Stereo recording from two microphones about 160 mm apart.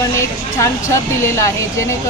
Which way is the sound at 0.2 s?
20° left (ahead or behind).